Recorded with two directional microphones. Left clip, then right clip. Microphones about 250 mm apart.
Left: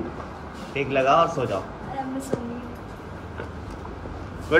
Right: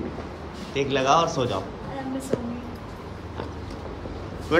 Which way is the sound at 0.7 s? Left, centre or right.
Centre.